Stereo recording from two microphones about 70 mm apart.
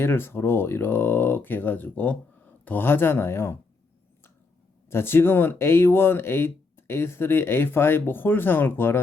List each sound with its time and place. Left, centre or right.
0.0 s speech: left
4.9 s speech: left